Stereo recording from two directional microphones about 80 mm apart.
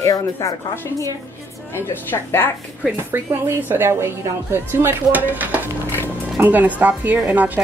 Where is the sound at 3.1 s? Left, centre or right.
Right.